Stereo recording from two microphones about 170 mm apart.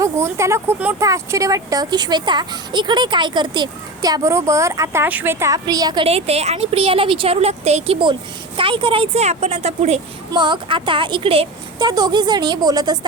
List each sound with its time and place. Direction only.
0.0 s a woman's voice: 15° right (ahead or behind)
6.1 s speech: 35° right (ahead or behind)
10.3 s a woman's voice: 25° right (ahead or behind)